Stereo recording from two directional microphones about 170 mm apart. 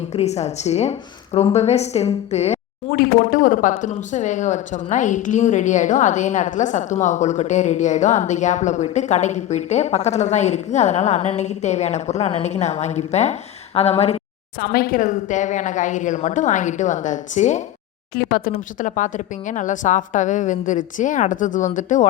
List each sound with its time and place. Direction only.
0.1 s a woman's voice: 40° left (ahead or behind)
2.9 s a woman's voice: 60° left (ahead or behind); by 14.2 s 35° left (ahead or behind)
14.6 s speech: 60° left (ahead or behind)
18.1 s speech: 60° left (ahead or behind)